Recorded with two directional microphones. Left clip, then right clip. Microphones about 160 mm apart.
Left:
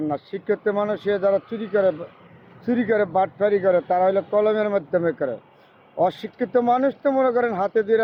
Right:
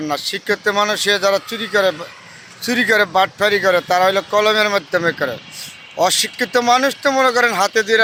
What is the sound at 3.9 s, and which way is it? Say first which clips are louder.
Speech: right 5 dB; 5° right (ahead or behind).